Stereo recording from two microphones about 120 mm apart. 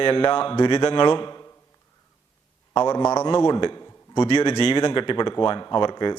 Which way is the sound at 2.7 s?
35° left (ahead or behind).